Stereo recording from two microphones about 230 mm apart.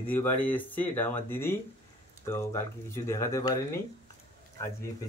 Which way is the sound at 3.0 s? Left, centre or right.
Centre.